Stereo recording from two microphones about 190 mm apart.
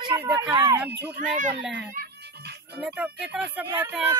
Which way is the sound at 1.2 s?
40° right (ahead or behind).